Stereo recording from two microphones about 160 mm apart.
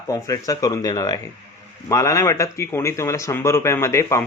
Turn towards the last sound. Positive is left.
turn(degrees=15)  # may be behind; listen again after turning